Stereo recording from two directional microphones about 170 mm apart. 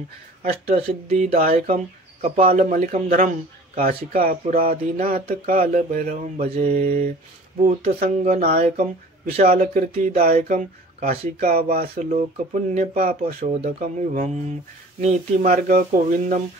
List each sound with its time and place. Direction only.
0.7 s speech: 35° right (ahead or behind)
1.3 s speech: 55° right (ahead or behind)
10.1 s speech: 60° right (ahead or behind)
11.9 s speech: 45° right (ahead or behind)
12.7 s speech: 55° right (ahead or behind)
13.4 s speech: 35° right (ahead or behind)
14.1 s speech: 50° right (ahead or behind)